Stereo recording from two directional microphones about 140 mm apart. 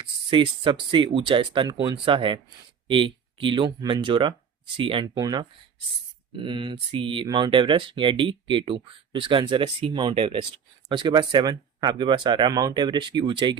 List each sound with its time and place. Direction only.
0.3 s speech: 35° right (ahead or behind)